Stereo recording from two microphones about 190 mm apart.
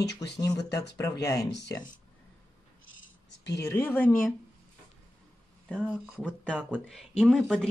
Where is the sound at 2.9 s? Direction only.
75° left (ahead or behind).